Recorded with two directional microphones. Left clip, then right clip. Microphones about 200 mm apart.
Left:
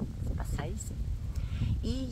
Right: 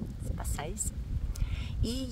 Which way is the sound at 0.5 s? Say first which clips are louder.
Right 4 dB; 15° right (ahead or behind).